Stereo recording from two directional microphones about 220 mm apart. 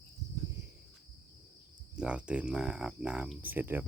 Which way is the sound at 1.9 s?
5° right (ahead or behind).